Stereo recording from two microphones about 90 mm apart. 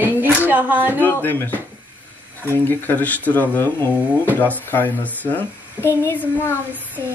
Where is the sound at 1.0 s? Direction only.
20° left (ahead or behind).